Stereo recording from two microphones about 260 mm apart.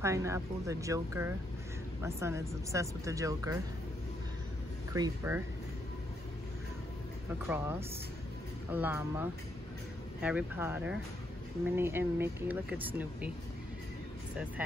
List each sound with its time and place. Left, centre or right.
0.0 s speech: centre
4.9 s speech: centre
7.4 s speech: centre